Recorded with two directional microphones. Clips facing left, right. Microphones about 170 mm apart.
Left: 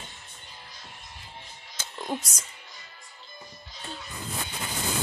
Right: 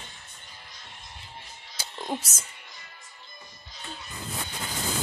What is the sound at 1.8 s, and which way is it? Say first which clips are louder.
Music: even; 10° right (ahead or behind).